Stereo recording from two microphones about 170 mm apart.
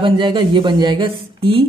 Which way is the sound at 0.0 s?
30° right (ahead or behind).